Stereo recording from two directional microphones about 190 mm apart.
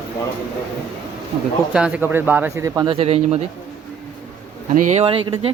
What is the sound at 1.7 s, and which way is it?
Speech, 5° right (ahead or behind).